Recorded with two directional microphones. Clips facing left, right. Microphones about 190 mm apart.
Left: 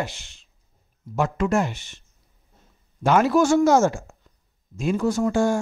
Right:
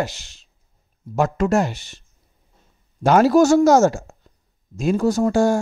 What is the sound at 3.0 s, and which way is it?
Speech, 40° right (ahead or behind).